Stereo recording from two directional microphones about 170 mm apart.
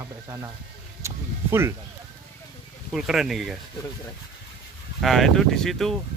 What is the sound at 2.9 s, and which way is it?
Speech, centre (ahead or behind).